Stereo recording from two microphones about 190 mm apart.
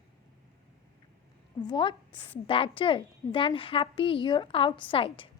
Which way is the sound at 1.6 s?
25° left (ahead or behind).